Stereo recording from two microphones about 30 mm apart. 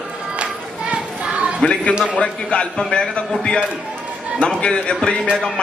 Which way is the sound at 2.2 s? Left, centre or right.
Left.